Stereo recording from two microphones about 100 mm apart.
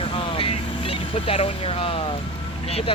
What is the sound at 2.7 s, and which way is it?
Speech, 85° left.